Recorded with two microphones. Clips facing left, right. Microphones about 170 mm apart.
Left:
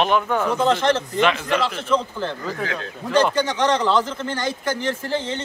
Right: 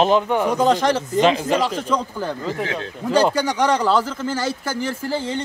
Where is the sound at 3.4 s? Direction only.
10° right (ahead or behind).